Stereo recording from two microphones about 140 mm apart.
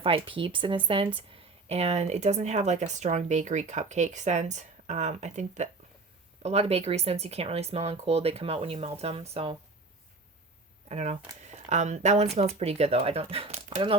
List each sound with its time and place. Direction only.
0.0 s speech: 40° right (ahead or behind)
10.8 s speech: 55° right (ahead or behind)